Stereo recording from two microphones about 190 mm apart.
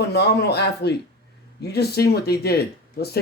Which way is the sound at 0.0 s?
60° left (ahead or behind).